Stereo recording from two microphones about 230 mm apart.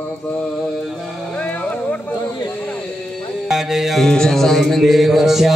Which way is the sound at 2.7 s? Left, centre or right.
Centre.